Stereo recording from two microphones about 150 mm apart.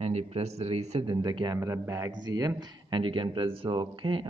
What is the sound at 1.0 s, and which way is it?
A man's voice, 30° right (ahead or behind).